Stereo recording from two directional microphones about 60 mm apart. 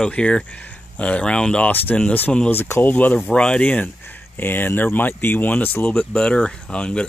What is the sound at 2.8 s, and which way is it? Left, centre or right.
Speech, left.